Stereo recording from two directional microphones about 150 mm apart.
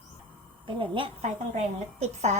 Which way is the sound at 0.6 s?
35° right (ahead or behind).